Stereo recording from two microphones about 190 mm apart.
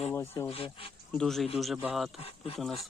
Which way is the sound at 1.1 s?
5° left (ahead or behind).